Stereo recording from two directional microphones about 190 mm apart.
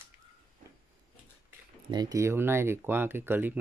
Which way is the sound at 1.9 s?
20° right (ahead or behind).